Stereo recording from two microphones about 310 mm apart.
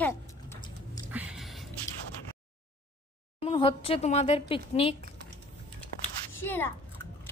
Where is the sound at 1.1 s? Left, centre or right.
Centre.